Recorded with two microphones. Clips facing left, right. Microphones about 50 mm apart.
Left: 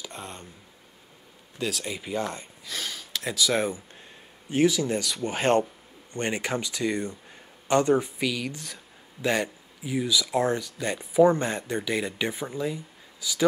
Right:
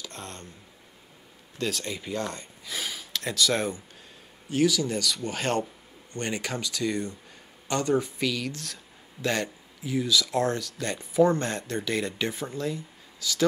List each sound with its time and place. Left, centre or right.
0.0 s a sound: centre
1.6 s speech: centre
2.6 s speech: centre
4.5 s speech: left
8.2 s speech: centre